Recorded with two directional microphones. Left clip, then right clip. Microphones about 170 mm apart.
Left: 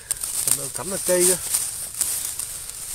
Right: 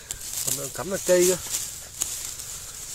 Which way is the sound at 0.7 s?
Centre (ahead or behind).